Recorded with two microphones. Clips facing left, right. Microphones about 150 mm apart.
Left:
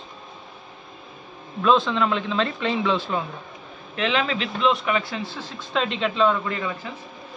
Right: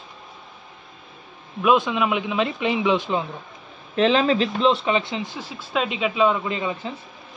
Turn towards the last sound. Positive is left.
turn(degrees=-20)  # may be behind; listen again after turning